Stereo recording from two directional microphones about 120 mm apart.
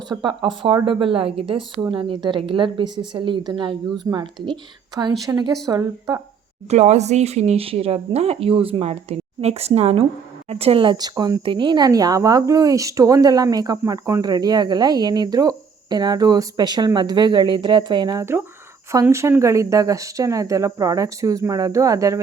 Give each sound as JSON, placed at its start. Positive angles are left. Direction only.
{"t": 0.1, "sound": "a woman's voice", "side_deg": -40}
{"t": 4.1, "sound": "speech", "side_deg": -30}
{"t": 5.2, "sound": "speech", "side_deg": -30}
{"t": 6.7, "sound": "speech", "side_deg": -70}